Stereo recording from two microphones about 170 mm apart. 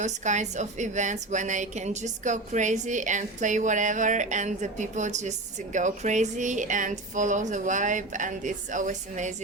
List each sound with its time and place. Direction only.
0.0 s a woman's voice: 45° right (ahead or behind)